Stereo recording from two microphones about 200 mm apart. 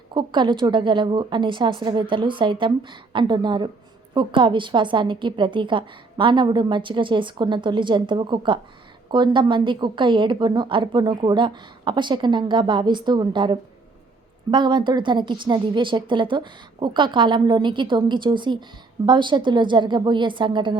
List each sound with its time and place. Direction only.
0.1 s a woman's voice: 25° right (ahead or behind)